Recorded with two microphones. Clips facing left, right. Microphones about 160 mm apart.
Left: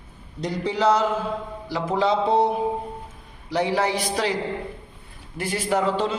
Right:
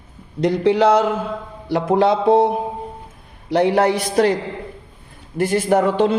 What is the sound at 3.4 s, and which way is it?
A man's voice, 60° right (ahead or behind).